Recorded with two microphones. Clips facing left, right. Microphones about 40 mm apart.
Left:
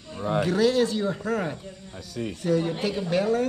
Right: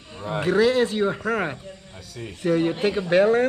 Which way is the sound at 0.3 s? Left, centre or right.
Right.